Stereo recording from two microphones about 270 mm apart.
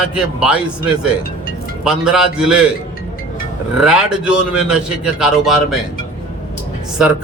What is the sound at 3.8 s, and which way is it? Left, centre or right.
A man's voice, centre.